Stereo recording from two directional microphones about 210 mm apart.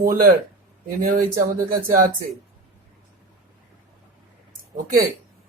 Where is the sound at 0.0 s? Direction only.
45° right (ahead or behind).